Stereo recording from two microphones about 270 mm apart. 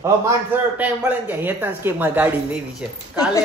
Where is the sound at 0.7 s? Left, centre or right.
Centre.